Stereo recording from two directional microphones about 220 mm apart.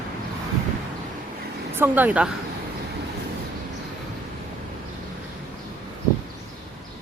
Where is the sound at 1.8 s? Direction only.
10° right (ahead or behind).